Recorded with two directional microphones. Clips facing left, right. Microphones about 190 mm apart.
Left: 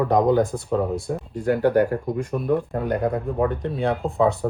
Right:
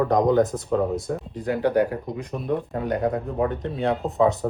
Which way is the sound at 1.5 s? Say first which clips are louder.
Left 3 dB; 50° left (ahead or behind).